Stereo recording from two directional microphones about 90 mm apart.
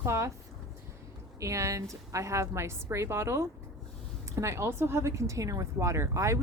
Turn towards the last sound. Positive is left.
turn(degrees=-35)  # may be behind; listen again after turning